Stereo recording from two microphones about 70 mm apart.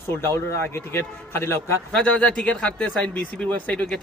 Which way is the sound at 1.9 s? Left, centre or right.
Centre.